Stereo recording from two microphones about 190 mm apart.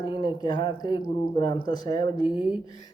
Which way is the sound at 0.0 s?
25° left (ahead or behind).